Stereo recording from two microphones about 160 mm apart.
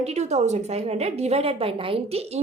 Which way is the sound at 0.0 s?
45° right (ahead or behind).